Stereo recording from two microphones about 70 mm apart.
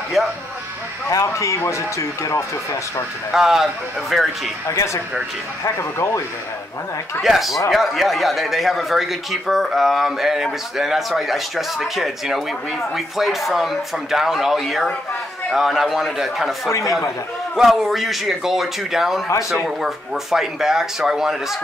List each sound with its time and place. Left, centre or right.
0.2 s a man's voice: centre
1.1 s speech: left
3.3 s a man's voice: centre
4.6 s speech: left
7.2 s a man's voice: centre